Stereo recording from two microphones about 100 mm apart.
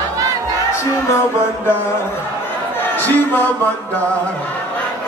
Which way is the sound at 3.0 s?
15° left (ahead or behind).